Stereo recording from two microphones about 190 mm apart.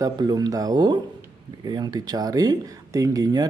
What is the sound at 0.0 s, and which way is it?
Speech, 20° right (ahead or behind).